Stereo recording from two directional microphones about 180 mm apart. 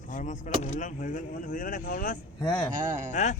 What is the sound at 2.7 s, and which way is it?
Speech, 45° right (ahead or behind).